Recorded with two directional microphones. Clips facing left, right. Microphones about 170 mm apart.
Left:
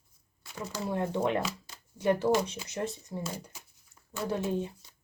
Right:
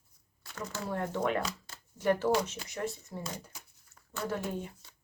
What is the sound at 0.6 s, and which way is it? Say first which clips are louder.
Speech: left 3 dB; 10° left (ahead or behind).